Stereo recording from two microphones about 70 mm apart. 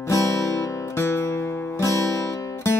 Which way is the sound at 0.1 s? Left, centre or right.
Left.